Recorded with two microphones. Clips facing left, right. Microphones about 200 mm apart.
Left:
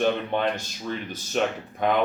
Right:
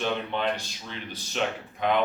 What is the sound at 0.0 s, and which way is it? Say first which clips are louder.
Speech: left 4 dB; 50° left (ahead or behind).